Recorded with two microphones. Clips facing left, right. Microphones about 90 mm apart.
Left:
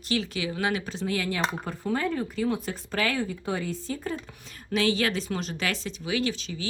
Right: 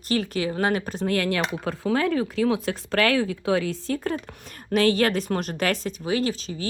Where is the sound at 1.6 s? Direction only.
90° right; by 4.1 s 70° right (ahead or behind).